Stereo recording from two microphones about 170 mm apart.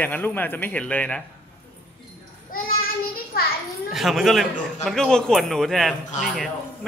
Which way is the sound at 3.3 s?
65° left (ahead or behind).